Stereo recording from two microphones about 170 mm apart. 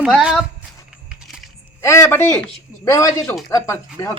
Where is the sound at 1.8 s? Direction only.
15° left (ahead or behind).